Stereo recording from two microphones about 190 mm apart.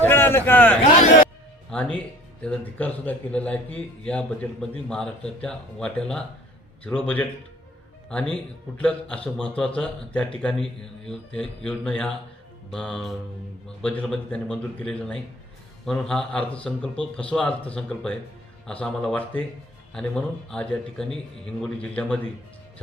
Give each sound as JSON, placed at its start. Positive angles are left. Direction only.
{"t": 0.0, "sound": "a sound", "side_deg": 10}
{"t": 0.9, "sound": "speech", "side_deg": 45}
{"t": 1.7, "sound": "a man's voice", "side_deg": 5}
{"t": 8.8, "sound": "a man's voice", "side_deg": 5}